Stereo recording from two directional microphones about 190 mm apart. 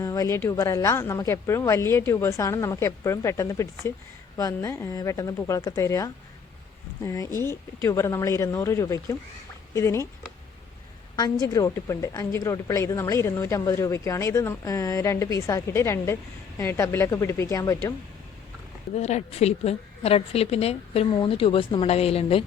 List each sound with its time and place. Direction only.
0.0 s a woman's voice: 15° left (ahead or behind)
11.2 s a woman's voice: 20° left (ahead or behind)
18.9 s a woman's voice: 35° left (ahead or behind)